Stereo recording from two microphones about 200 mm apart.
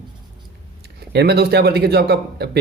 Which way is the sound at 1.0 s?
55° right (ahead or behind).